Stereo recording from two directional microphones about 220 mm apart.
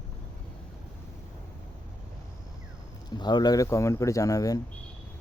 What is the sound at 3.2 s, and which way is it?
Speech, 20° left (ahead or behind).